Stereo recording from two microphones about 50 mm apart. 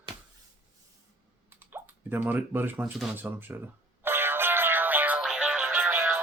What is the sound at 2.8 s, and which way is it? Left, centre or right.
Speech, centre.